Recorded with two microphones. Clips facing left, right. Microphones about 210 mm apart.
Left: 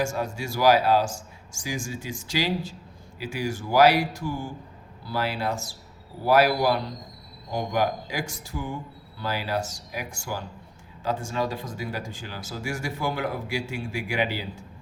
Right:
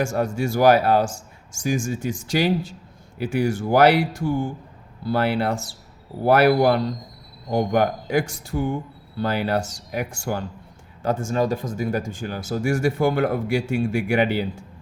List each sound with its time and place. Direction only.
0.2 s a man's voice: 55° right (ahead or behind)
11.0 s speech: 50° right (ahead or behind)